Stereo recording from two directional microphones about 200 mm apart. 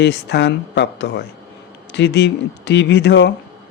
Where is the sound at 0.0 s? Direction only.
60° left (ahead or behind).